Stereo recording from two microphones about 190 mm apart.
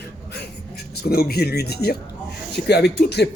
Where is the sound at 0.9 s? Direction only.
55° left (ahead or behind).